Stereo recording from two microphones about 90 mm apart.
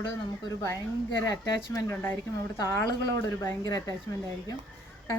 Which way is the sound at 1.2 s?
40° left (ahead or behind).